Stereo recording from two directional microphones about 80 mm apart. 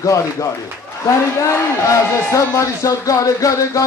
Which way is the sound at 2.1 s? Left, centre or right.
Left.